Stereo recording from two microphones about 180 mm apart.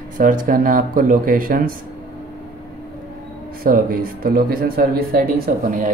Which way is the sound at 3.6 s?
50° right (ahead or behind).